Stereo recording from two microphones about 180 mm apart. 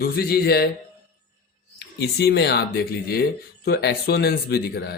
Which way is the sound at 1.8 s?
65° left (ahead or behind).